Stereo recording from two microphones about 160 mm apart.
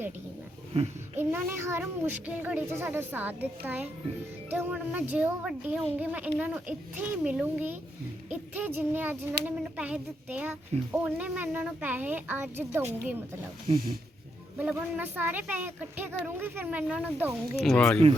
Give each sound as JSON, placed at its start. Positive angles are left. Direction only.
{"t": 0.7, "sound": "a sound", "side_deg": -40}
{"t": 1.2, "sound": "speech", "side_deg": -10}
{"t": 13.7, "sound": "speech", "side_deg": -70}
{"t": 14.6, "sound": "speech", "side_deg": -10}
{"t": 17.7, "sound": "speech", "side_deg": 10}